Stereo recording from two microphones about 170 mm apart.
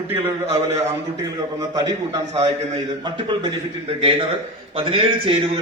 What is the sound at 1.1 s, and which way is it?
A man's voice, 20° right (ahead or behind).